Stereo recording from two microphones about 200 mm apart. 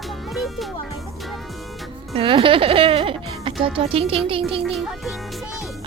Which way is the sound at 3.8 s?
30° right (ahead or behind).